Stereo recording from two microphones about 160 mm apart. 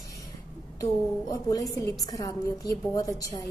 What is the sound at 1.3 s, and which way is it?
A woman's voice, 20° left (ahead or behind).